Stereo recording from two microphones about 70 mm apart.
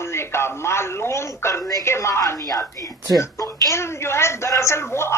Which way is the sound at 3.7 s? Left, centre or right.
Left.